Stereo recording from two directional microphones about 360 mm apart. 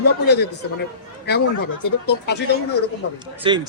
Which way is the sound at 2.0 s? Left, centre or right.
Left.